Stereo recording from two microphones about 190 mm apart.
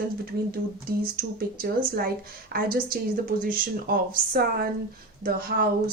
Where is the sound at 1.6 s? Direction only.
55° right (ahead or behind).